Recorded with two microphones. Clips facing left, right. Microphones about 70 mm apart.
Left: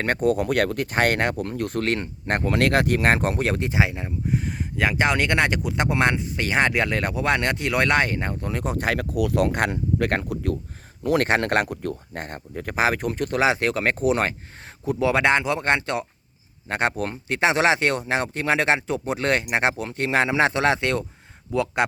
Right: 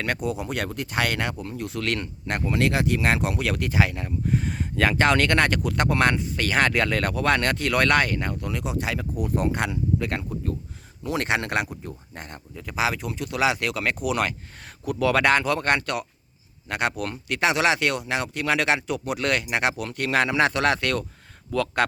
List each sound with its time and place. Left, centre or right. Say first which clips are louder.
0.0 s speech: left 6 dB; left
1.8 s speech: left 3 dB; left
4.3 s speech: even; centre; by 9.0 s left
9.0 s speech: left 4 dB; left
12.2 s speech: left 4 dB; left; by 21.8 s centre